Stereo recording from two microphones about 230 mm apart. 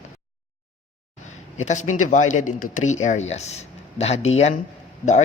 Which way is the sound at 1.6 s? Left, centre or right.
Left.